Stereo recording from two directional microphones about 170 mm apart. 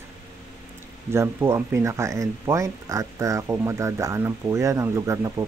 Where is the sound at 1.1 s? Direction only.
15° right (ahead or behind).